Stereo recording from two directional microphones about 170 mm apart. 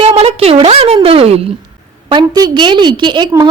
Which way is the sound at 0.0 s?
35° right (ahead or behind).